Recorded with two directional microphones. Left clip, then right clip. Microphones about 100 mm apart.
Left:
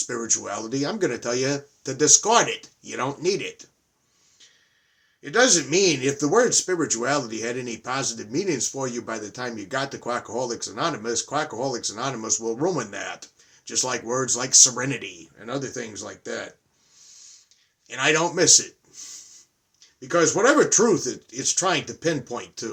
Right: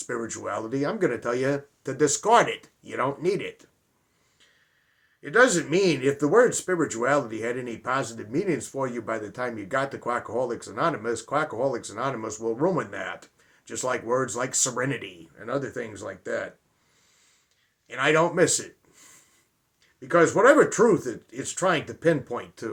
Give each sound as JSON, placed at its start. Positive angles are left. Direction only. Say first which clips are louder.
{"t": 0.0, "sound": "speech", "louder": "left 4 dB", "side_deg": 25}
{"t": 5.2, "sound": "speech", "louder": "even", "side_deg": 30}
{"t": 17.8, "sound": "a man's voice", "louder": "even", "side_deg": 25}